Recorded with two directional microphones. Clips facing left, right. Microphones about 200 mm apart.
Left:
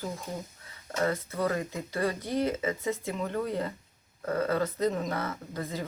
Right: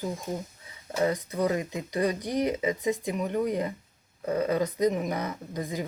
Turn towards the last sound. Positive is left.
turn(degrees=-15)  # may be behind; listen again after turning